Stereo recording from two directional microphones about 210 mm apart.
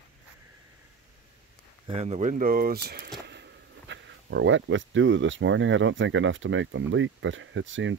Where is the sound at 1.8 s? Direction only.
30° right (ahead or behind); by 3.1 s 50° right (ahead or behind).